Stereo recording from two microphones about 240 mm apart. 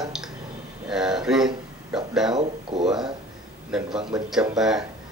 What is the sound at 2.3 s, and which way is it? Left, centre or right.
Speech, centre.